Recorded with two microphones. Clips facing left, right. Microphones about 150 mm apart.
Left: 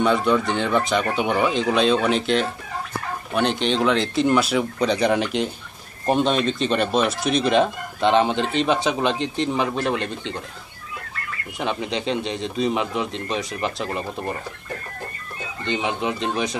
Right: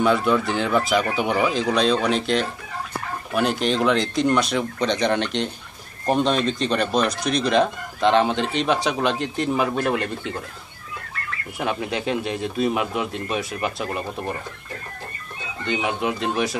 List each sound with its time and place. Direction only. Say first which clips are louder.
0.0 s speech: even; centre (ahead or behind)
11.5 s speech: even; 5° right (ahead or behind)
15.6 s speech: even; 5° right (ahead or behind)